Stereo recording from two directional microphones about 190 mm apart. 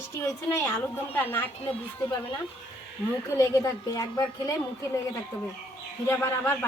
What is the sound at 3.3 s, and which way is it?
Speech, 15° left (ahead or behind).